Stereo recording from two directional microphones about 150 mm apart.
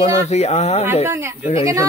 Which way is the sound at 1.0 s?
15° right (ahead or behind).